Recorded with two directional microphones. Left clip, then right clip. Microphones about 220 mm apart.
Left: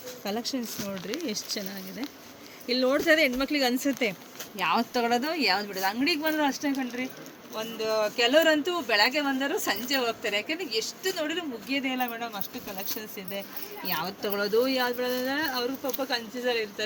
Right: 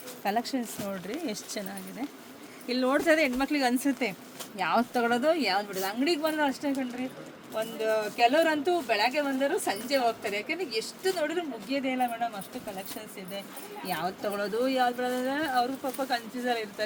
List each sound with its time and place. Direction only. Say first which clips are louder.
0.3 s speech: right 3 dB; 30° right (ahead or behind)
2.6 s speech: left 2 dB; 25° right (ahead or behind)
13.8 s speech: even; 15° right (ahead or behind)